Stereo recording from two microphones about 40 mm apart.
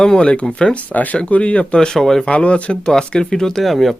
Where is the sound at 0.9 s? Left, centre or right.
Left.